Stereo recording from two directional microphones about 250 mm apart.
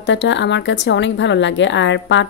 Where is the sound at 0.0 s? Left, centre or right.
Left.